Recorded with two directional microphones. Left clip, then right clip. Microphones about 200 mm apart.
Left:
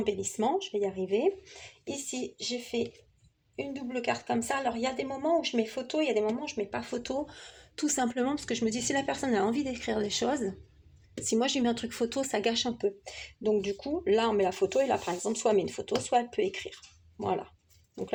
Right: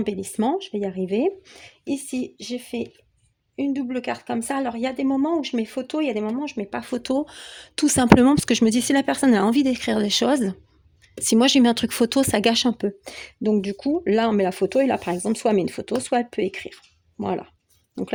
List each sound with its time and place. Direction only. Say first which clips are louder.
0.0 s speech: right 5 dB; 55° right (ahead or behind)